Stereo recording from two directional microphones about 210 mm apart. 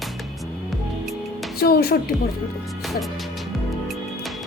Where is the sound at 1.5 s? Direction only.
45° left (ahead or behind).